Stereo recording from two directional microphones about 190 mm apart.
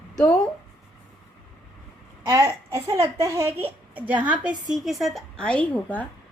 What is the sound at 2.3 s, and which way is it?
A woman's voice, 15° right (ahead or behind).